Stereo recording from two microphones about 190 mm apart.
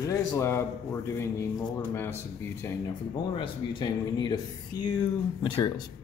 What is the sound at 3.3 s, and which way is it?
Speech, 25° left (ahead or behind).